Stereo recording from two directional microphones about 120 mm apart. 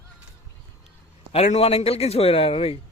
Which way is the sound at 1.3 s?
60° left (ahead or behind).